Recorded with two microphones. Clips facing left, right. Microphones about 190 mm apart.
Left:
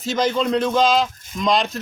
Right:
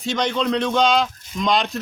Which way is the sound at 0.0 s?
Centre (ahead or behind).